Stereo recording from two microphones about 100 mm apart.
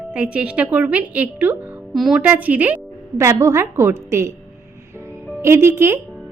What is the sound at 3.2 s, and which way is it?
A woman's voice, 30° right (ahead or behind).